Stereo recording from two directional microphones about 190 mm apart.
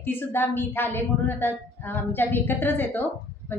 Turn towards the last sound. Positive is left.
turn(degrees=10)  # may be behind; listen again after turning